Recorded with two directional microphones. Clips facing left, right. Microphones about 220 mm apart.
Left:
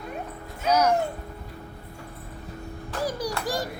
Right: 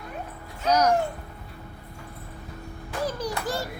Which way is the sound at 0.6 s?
10° left (ahead or behind).